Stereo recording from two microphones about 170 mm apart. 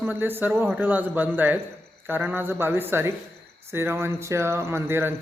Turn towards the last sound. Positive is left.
turn(degrees=-15)  # may be behind; listen again after turning